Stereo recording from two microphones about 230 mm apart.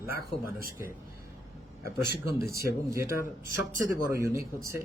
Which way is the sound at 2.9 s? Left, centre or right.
Centre.